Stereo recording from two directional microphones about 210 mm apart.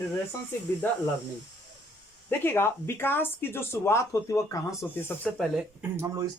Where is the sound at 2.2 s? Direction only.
10° left (ahead or behind).